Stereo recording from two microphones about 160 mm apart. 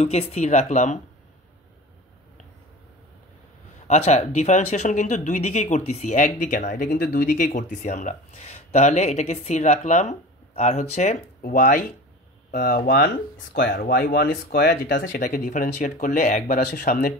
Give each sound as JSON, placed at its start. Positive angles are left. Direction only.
{"t": 0.0, "sound": "speech", "side_deg": 40}
{"t": 3.8, "sound": "speech", "side_deg": 45}
{"t": 11.4, "sound": "speech", "side_deg": 65}